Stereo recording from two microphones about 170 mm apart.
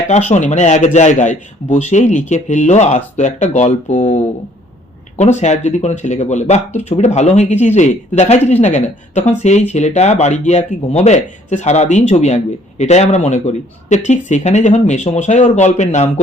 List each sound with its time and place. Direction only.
0.1 s a man's voice: 45° left (ahead or behind)